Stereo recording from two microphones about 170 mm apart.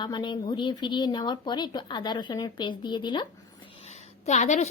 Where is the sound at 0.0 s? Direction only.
25° left (ahead or behind).